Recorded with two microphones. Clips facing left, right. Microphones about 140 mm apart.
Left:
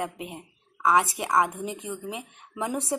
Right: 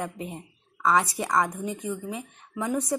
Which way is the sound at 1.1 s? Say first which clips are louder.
Left 1 dB; 10° left (ahead or behind).